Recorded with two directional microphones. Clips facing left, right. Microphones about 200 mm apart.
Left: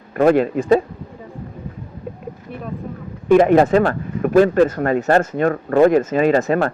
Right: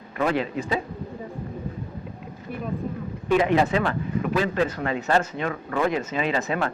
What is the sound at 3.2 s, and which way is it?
Speech, 50° left (ahead or behind).